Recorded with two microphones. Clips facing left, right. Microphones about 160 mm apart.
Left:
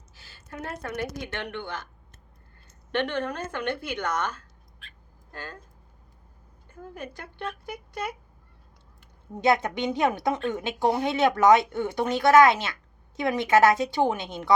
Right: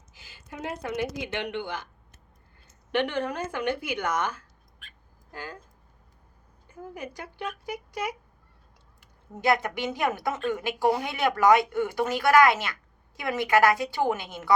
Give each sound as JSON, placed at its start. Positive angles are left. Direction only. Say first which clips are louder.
{"t": 0.1, "sound": "speech", "louder": "left 1 dB", "side_deg": -15}
{"t": 2.9, "sound": "speech", "louder": "right 1 dB", "side_deg": -10}
{"t": 6.9, "sound": "speech", "louder": "even", "side_deg": -10}
{"t": 9.4, "sound": "a woman's voice", "louder": "left 2 dB", "side_deg": 25}